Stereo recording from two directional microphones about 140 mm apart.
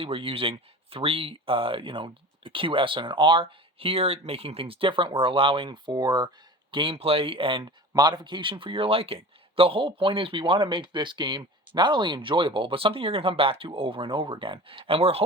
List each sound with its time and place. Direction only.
0.0 s speech: 40° right (ahead or behind)